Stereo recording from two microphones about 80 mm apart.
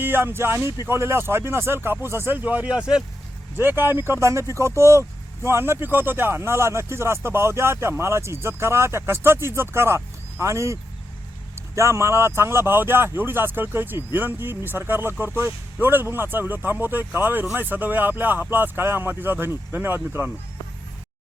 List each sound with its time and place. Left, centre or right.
0.0 s speech: right
3.6 s speech: right